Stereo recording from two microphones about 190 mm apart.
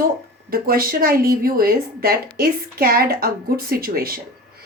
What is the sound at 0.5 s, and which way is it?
A woman's voice, 50° right (ahead or behind).